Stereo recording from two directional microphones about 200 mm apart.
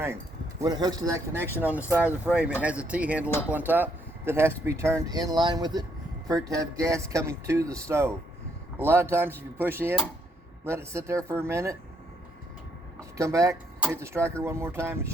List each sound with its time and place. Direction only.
0.6 s speech: 20° right (ahead or behind)
13.1 s speech: 15° right (ahead or behind)